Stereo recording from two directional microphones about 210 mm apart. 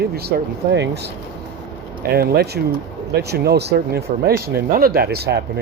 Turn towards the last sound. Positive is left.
turn(degrees=-50)  # may be behind; listen again after turning